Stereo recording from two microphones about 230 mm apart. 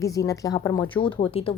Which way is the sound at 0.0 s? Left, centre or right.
Centre.